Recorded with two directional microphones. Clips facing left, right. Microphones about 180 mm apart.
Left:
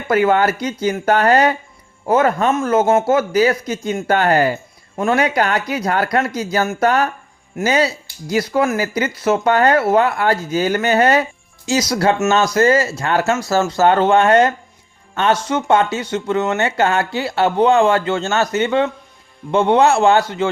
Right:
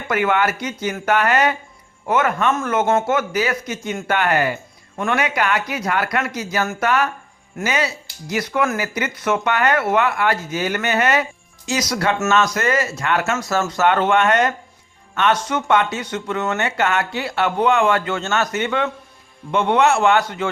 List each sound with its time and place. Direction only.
0.1 s speech: 35° left (ahead or behind)